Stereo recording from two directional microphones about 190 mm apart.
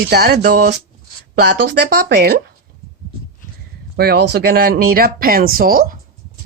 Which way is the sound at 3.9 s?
55° right (ahead or behind).